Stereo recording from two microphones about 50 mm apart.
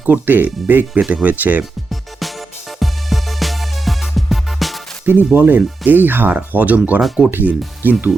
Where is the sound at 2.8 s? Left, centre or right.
Centre.